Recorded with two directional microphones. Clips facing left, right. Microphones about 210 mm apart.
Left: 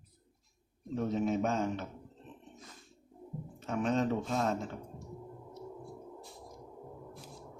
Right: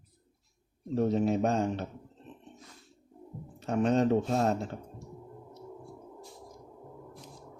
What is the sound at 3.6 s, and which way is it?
Speech, 40° right (ahead or behind).